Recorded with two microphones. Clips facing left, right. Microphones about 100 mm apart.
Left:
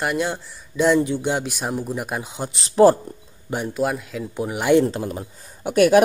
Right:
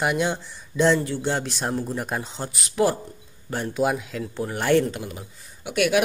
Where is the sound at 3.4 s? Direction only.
15° left (ahead or behind).